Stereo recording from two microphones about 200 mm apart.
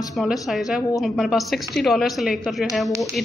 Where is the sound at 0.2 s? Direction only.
Centre (ahead or behind).